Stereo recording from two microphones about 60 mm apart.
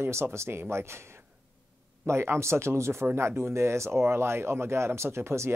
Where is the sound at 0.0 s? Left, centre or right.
Right.